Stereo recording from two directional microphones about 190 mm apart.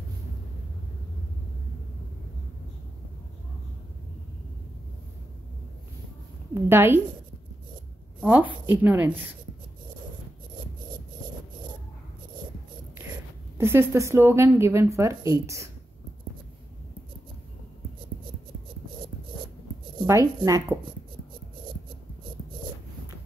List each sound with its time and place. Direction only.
6.5 s a woman's voice: 10° right (ahead or behind)
8.2 s a woman's voice: 10° right (ahead or behind)
13.6 s a woman's voice: 15° right (ahead or behind)
20.0 s speech: 20° right (ahead or behind)